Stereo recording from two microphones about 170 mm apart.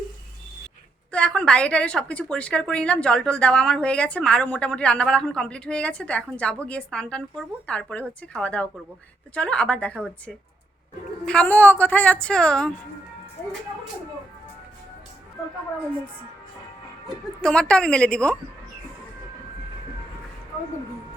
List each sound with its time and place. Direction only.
1.1 s a woman's voice: 5° left (ahead or behind)
17.4 s a woman's voice: 5° left (ahead or behind)